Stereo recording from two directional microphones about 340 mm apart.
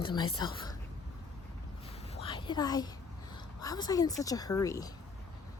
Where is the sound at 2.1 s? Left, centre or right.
Centre.